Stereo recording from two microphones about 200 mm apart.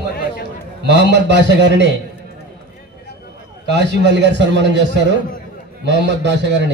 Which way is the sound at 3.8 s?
60° right (ahead or behind).